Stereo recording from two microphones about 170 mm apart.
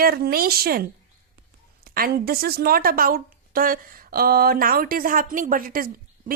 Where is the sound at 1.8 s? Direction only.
60° right (ahead or behind).